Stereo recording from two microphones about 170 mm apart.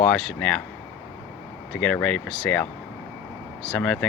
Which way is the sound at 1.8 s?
5° left (ahead or behind).